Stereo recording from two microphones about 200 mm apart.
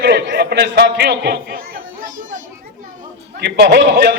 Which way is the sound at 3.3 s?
50° right (ahead or behind).